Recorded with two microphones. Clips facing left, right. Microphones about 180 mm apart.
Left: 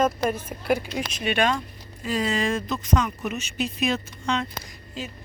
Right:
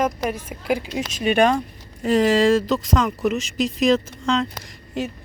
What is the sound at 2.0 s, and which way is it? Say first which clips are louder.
Speech: right 9 dB; 70° right (ahead or behind).